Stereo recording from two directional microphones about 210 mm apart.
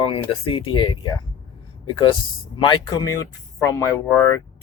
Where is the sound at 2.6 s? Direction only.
20° left (ahead or behind).